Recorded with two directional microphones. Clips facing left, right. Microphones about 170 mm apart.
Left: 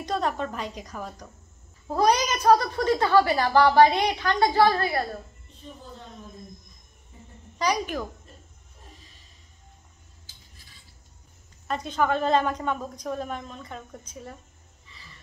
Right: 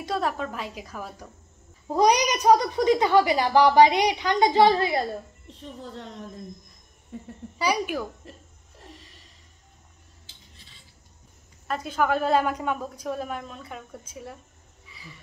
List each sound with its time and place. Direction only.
0.0 s a woman's voice: 5° right (ahead or behind)
1.9 s a child's voice: 15° right (ahead or behind)
5.5 s a child's voice: 80° right
7.5 s a child's voice: 10° right (ahead or behind)
8.7 s a sound: 75° right (ahead or behind)
11.6 s a child's voice: 5° right (ahead or behind)
14.9 s wild animals: 10° right (ahead or behind)